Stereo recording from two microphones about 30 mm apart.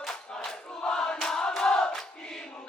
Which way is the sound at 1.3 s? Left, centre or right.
Left.